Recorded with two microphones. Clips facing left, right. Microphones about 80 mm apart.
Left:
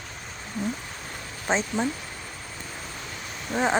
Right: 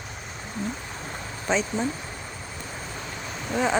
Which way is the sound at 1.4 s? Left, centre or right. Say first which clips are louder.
Even; left.